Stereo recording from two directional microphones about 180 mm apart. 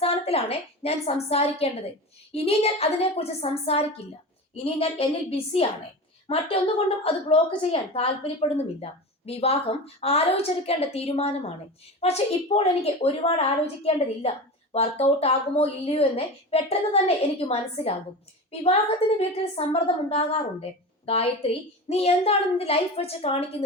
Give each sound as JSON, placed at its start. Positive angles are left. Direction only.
{"t": 0.0, "sound": "a woman's voice", "side_deg": 35}
{"t": 19.5, "sound": "a woman's voice", "side_deg": 35}